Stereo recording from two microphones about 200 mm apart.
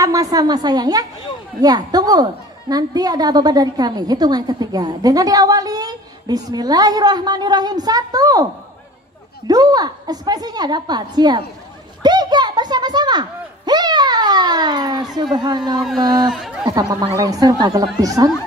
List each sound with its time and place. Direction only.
0.0 s a woman's voice: 15° right (ahead or behind)
9.5 s a woman's voice: 20° right (ahead or behind)
12.0 s a sound: 20° right (ahead or behind)
15.3 s a woman's voice: 20° right (ahead or behind)
16.2 s speech: centre (ahead or behind)
16.6 s a woman's voice: 20° right (ahead or behind)